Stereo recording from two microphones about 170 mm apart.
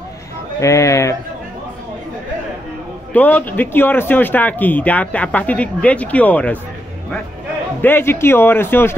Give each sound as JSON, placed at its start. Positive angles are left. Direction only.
{"t": 0.6, "sound": "speech", "side_deg": 20}
{"t": 3.1, "sound": "speech", "side_deg": 10}
{"t": 7.8, "sound": "speech", "side_deg": 10}